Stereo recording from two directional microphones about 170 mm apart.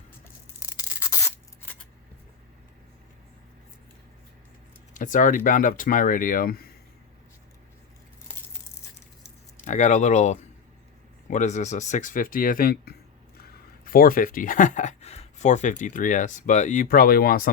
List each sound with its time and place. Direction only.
0.8 s rub: 20° left (ahead or behind)
4.9 s speech: 50° left (ahead or behind)
9.6 s speech: 45° left (ahead or behind)